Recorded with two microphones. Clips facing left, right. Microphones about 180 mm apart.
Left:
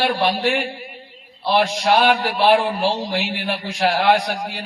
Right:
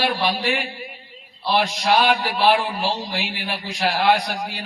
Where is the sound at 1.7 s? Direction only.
55° left (ahead or behind).